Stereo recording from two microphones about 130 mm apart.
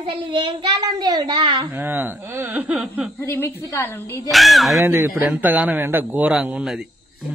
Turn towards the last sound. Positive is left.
turn(degrees=-5)  # may be behind; listen again after turning